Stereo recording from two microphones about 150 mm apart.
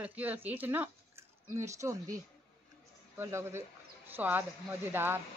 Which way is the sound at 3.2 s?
15° right (ahead or behind).